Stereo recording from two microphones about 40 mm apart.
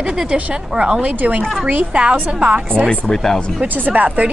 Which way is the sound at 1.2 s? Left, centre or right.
Right.